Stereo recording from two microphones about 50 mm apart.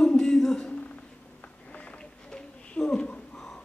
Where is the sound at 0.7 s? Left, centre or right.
Left.